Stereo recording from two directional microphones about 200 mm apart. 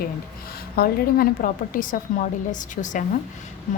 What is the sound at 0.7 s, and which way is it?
A woman's voice, 50° left (ahead or behind).